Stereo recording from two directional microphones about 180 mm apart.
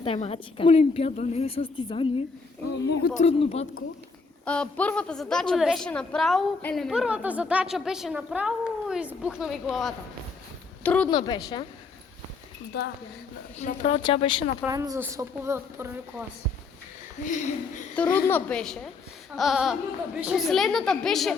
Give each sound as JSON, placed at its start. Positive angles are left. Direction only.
{"t": 0.0, "sound": "a woman's voice", "side_deg": 30}
{"t": 2.7, "sound": "speech", "side_deg": 70}
{"t": 3.2, "sound": "a woman's voice", "side_deg": 35}
{"t": 4.4, "sound": "a woman's voice", "side_deg": 5}
{"t": 11.1, "sound": "a woman's voice", "side_deg": 25}
{"t": 12.7, "sound": "speech", "side_deg": 65}
{"t": 13.6, "sound": "a woman's voice", "side_deg": 40}
{"t": 14.7, "sound": "speech", "side_deg": -15}
{"t": 17.2, "sound": "speech", "side_deg": 45}
{"t": 17.9, "sound": "a woman's voice", "side_deg": 10}